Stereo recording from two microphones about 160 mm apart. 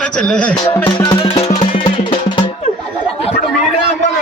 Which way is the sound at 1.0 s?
30° left (ahead or behind).